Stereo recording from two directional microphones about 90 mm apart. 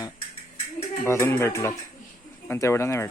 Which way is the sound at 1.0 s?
30° left (ahead or behind).